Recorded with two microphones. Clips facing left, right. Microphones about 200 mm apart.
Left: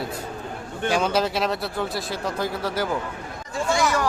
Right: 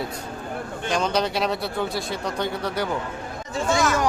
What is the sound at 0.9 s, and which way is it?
Speech, 5° left (ahead or behind).